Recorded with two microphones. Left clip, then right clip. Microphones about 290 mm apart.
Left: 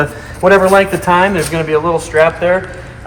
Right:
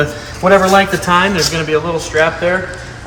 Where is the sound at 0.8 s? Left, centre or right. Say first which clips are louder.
Left 1 dB; left.